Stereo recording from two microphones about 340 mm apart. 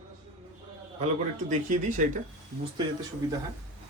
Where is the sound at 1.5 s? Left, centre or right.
Right.